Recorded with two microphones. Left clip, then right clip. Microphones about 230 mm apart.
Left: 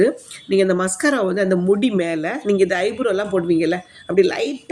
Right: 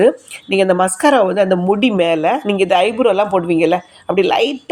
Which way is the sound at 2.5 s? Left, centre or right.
Right.